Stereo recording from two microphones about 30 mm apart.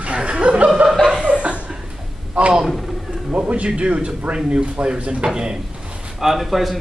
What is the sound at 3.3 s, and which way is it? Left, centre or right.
Speech, right.